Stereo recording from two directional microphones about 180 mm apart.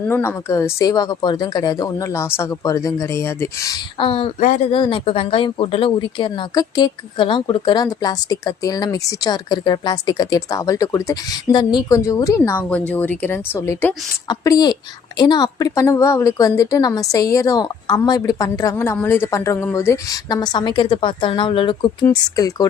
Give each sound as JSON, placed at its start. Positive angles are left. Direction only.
{"t": 0.1, "sound": "speech", "side_deg": 15}
{"t": 3.9, "sound": "speech", "side_deg": 30}